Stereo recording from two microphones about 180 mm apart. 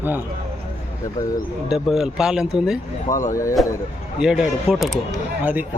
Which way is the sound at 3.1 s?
45° left (ahead or behind).